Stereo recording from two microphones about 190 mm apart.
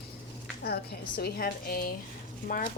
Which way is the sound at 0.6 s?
55° left (ahead or behind).